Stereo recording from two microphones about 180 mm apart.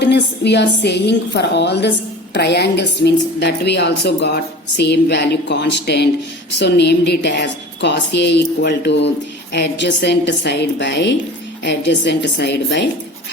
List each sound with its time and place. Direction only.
0.0 s a woman's voice: 70° left (ahead or behind)